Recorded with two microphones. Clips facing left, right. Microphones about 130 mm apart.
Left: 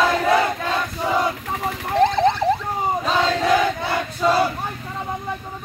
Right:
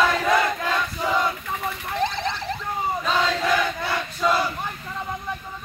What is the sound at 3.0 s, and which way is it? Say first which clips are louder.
Battle cry: left 2 dB; 30° left (ahead or behind).